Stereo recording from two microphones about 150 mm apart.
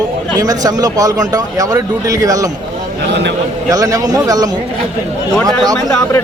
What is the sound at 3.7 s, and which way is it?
Speech, 25° right (ahead or behind).